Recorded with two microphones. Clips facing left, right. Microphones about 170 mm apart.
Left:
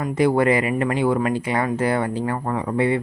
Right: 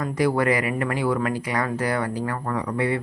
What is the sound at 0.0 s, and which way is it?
A woman's voice, 25° left (ahead or behind).